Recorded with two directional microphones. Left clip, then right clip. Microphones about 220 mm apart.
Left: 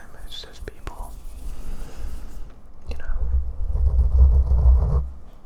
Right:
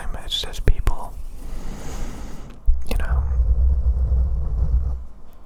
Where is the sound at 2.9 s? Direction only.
25° right (ahead or behind).